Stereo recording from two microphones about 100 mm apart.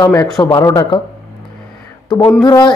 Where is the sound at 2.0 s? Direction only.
45° left (ahead or behind).